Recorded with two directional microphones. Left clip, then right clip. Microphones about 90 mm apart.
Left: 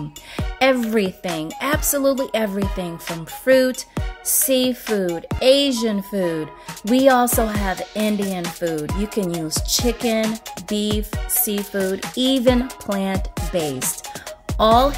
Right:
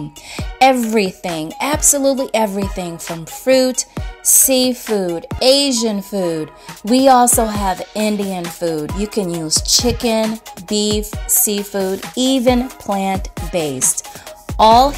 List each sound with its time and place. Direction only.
0.4 s speech: 20° right (ahead or behind)
8.5 s speech: 20° right (ahead or behind)
9.8 s music: 30° right (ahead or behind)
10.7 s speech: 25° right (ahead or behind)